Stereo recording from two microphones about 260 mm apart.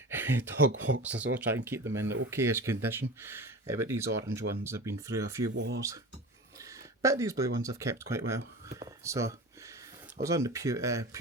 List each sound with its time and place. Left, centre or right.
0.1 s a sound: centre
0.7 s speech: right
1.3 s speech: centre
5.5 s speech: right
6.6 s speech: centre